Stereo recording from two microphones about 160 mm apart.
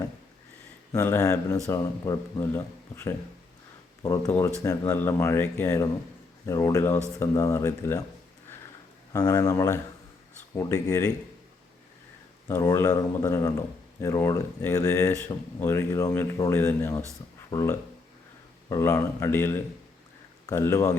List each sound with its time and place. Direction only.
0.9 s a man's voice: 15° left (ahead or behind)
9.1 s a man's voice: 20° left (ahead or behind)
12.5 s a man's voice: 15° left (ahead or behind)